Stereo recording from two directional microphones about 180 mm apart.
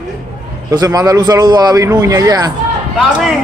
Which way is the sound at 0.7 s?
20° right (ahead or behind).